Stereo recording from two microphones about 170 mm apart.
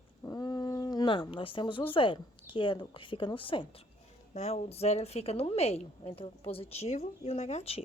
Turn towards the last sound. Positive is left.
turn(degrees=40)  # may be behind; listen again after turning